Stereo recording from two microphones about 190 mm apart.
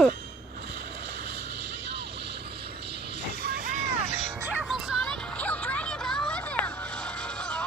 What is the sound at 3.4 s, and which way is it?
Vehicle, 55° right (ahead or behind).